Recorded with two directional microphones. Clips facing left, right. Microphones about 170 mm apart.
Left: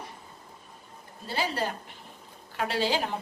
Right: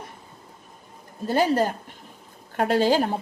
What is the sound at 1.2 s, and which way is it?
Speech, 45° right (ahead or behind).